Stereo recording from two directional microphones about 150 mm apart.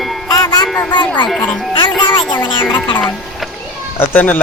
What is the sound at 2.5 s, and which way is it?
Speech, 35° left (ahead or behind).